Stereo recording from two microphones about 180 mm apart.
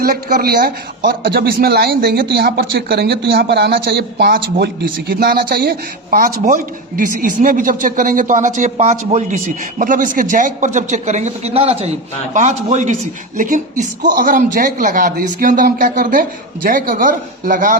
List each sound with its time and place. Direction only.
0.0 s a man's voice: 55° right (ahead or behind)